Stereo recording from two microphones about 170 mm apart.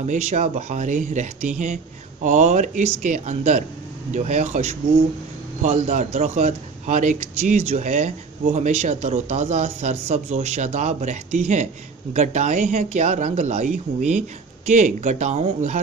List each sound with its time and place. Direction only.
0.0 s a man's voice: 45° right (ahead or behind)